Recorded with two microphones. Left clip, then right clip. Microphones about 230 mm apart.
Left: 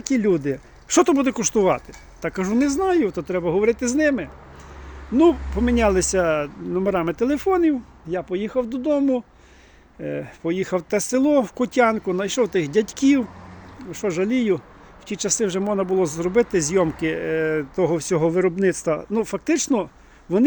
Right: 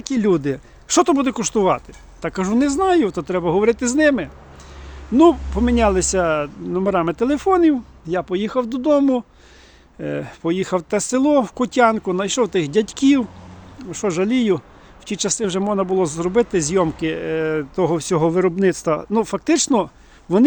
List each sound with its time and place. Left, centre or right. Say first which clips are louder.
0.0 s speech: right 2 dB; centre